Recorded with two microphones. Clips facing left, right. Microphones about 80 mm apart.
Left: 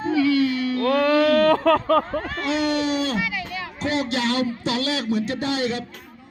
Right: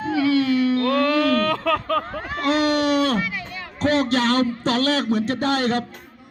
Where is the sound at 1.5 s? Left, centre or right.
Left.